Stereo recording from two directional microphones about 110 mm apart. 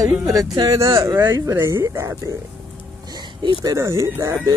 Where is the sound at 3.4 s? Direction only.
45° right (ahead or behind).